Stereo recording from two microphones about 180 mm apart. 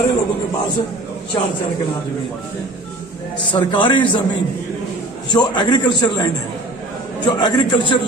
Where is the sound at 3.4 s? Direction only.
25° left (ahead or behind).